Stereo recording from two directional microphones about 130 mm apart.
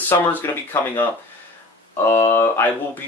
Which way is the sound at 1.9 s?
15° left (ahead or behind).